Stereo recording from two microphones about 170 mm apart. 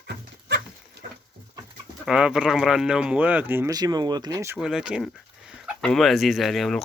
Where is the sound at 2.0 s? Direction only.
5° right (ahead or behind); by 4.6 s 20° right (ahead or behind).